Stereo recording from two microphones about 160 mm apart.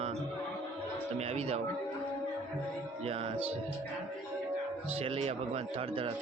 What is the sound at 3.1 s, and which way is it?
Speech, 40° right (ahead or behind).